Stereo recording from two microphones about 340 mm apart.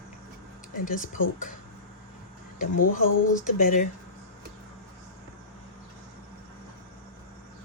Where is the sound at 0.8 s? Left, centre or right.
Left.